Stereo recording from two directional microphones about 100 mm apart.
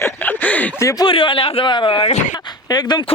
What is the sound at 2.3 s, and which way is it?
Speech, 45° left (ahead or behind).